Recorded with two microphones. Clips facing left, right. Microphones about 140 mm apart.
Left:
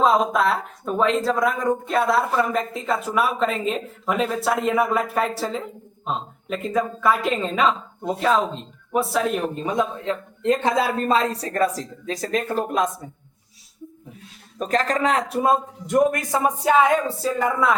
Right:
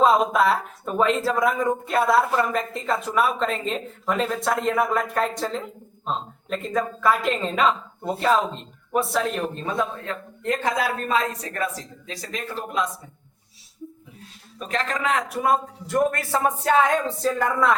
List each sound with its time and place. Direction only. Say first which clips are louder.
0.0 s speech: even; centre (ahead or behind)
9.6 s speech: left 3 dB; 15° left (ahead or behind); by 12.9 s 50° left (ahead or behind)
14.6 s a man's voice: left 5 dB; 40° left (ahead or behind); by 17.7 s 5° left (ahead or behind)